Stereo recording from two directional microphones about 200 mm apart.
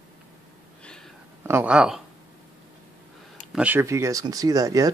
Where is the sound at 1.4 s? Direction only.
10° right (ahead or behind).